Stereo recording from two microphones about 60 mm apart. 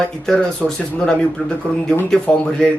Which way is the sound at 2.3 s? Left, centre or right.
Centre.